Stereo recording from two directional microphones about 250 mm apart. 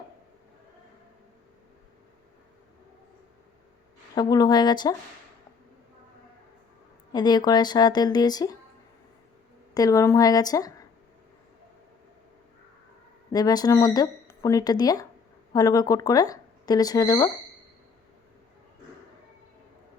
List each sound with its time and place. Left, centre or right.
4.1 s speech: centre
7.1 s speech: centre
9.7 s speech: centre
13.3 s speech: centre